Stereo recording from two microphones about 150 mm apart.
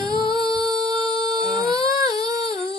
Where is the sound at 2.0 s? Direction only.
25° right (ahead or behind).